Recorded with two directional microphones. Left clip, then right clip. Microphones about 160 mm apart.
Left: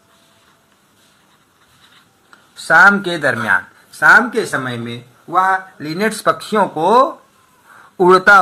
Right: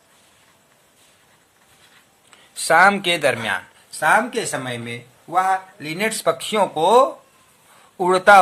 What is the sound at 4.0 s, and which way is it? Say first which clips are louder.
Speech: left 7 dB; 5° right (ahead or behind).